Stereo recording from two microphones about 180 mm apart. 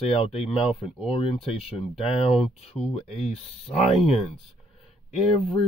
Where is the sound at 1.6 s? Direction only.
35° left (ahead or behind).